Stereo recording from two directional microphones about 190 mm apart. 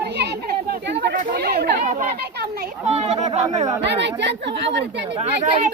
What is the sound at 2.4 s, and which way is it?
Children playing, 55° right (ahead or behind).